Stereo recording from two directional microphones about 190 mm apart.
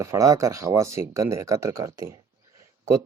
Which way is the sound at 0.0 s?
15° right (ahead or behind).